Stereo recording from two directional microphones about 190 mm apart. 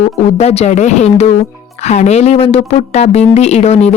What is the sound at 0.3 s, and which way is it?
Speech, 35° left (ahead or behind).